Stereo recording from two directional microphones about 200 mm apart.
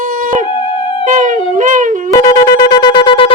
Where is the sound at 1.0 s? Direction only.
40° right (ahead or behind).